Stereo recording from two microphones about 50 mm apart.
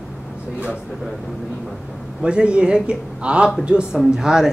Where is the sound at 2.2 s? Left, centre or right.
Right.